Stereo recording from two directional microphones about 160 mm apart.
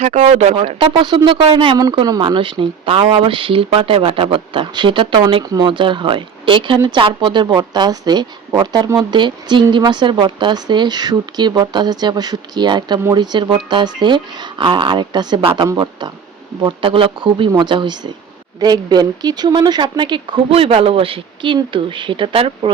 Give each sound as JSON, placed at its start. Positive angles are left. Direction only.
{"t": 0.0, "sound": "speech", "side_deg": -45}
{"t": 0.7, "sound": "speech", "side_deg": -30}